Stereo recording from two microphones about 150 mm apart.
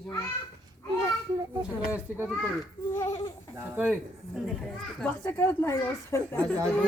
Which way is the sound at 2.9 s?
20° left (ahead or behind).